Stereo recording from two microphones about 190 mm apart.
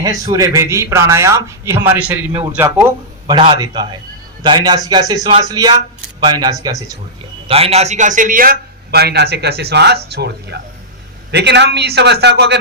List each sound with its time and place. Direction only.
0.0 s a man's voice: 20° right (ahead or behind)
3.3 s a man's voice: 30° right (ahead or behind)
7.4 s a man's voice: 30° right (ahead or behind); by 12.5 s 65° right (ahead or behind)